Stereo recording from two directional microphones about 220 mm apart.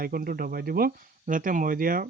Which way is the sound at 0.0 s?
40° right (ahead or behind).